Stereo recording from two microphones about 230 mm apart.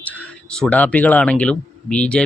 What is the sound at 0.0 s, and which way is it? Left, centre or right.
Speech, centre.